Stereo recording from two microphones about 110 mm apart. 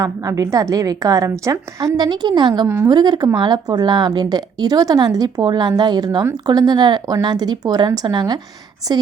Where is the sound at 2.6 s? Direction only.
25° right (ahead or behind).